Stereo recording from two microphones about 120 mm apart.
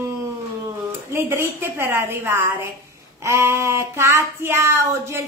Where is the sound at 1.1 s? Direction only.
20° right (ahead or behind).